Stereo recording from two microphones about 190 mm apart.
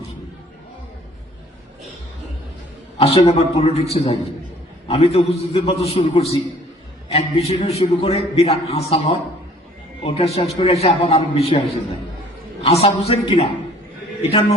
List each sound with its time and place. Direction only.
3.2 s a man's voice: 35° left (ahead or behind)
12.6 s a man's voice: 30° left (ahead or behind)